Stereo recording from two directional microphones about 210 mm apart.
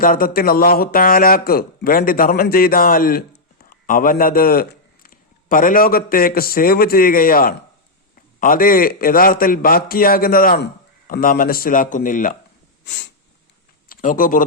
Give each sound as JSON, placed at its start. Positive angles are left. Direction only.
{"t": 0.0, "sound": "a man's voice", "side_deg": 40}
{"t": 12.8, "sound": "snort", "side_deg": 55}
{"t": 13.8, "sound": "speech", "side_deg": 40}